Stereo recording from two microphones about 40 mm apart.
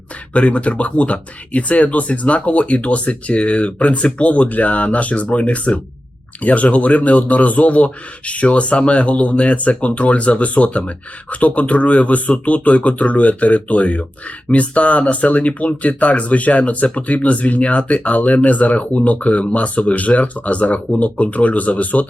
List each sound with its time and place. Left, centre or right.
0.3 s speech: left